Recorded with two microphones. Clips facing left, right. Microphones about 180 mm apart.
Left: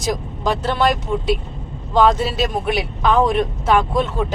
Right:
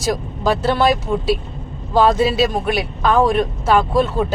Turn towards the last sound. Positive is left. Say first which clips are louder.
# right 2 dB
turn(degrees=-5)  # may be behind; listen again after turning